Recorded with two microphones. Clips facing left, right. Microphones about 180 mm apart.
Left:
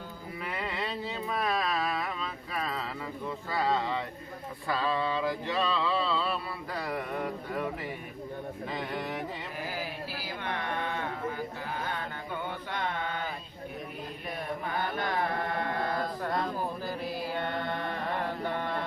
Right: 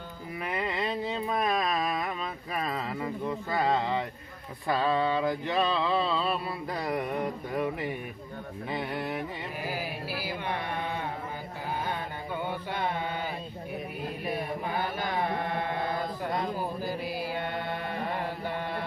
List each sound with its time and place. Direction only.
0.4 s a sound: 20° right (ahead or behind)
4.7 s mantra: 20° right (ahead or behind)
8.7 s speech: 10° right (ahead or behind)
10.2 s carnatic music: 10° right (ahead or behind)
12.7 s mantra: 10° right (ahead or behind)
14.3 s carnatic music: 5° right (ahead or behind)